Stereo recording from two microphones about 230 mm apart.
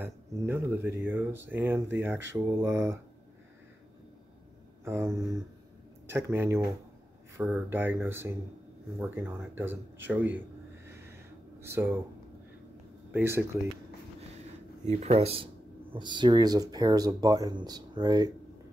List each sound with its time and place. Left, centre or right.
0.0 s speech: centre
4.8 s speech: centre
11.6 s speech: centre
13.1 s speech: centre
14.9 s speech: right